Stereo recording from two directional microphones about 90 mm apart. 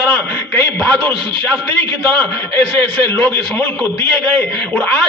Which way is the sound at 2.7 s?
10° left (ahead or behind).